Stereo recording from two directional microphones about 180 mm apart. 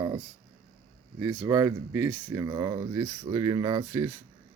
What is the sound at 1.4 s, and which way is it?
Speech, 15° right (ahead or behind).